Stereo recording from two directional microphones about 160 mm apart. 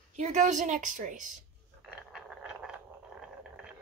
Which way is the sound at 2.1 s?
5° right (ahead or behind).